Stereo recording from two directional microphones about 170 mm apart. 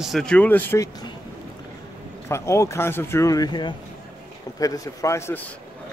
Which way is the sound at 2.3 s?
15° left (ahead or behind).